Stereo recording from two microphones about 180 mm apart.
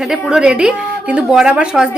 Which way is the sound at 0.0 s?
5° right (ahead or behind).